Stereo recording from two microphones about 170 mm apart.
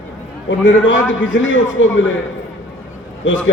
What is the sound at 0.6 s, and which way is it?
A man's voice, 90° left.